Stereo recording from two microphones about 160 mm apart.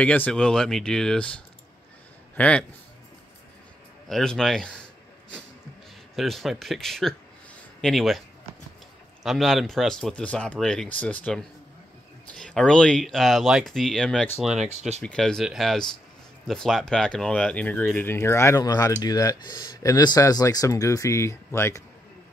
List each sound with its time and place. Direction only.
0.0 s speech: 10° left (ahead or behind)
2.3 s speech: 10° left (ahead or behind)
4.1 s speech: 5° left (ahead or behind)
6.1 s speech: centre (ahead or behind)
9.2 s speech: centre (ahead or behind)
14.4 s speech: centre (ahead or behind)
14.7 s speech: 45° right (ahead or behind)
15.0 s speech: 5° left (ahead or behind)